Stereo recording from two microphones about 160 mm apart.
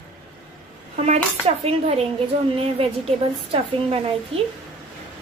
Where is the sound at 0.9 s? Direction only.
40° right (ahead or behind).